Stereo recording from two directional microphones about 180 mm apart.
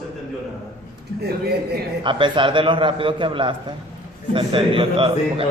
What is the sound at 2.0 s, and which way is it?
A man's voice, 25° right (ahead or behind).